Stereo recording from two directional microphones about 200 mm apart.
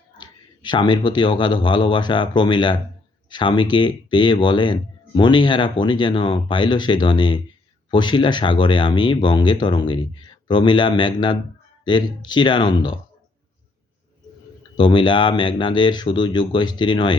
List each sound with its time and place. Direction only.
0.2 s speech: 20° left (ahead or behind)
14.8 s speech: 25° left (ahead or behind)